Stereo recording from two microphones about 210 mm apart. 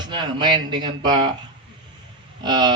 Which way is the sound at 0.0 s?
20° right (ahead or behind).